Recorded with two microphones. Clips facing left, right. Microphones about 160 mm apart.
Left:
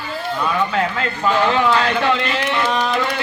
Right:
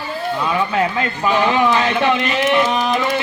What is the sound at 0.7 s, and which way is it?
A man's voice, 15° right (ahead or behind).